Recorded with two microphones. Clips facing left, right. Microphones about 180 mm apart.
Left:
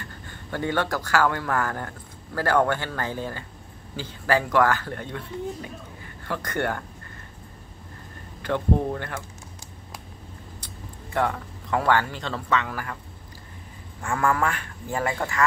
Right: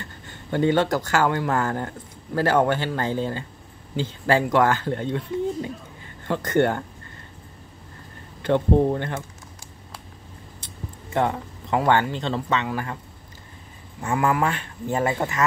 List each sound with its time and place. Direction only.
0.0 s speech: 20° right (ahead or behind)
8.4 s speech: 25° right (ahead or behind)
11.1 s speech: 25° right (ahead or behind)
14.0 s speech: 20° right (ahead or behind)